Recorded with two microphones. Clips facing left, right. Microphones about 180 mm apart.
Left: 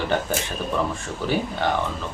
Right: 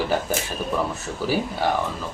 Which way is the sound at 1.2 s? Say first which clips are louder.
Even; 5° right (ahead or behind).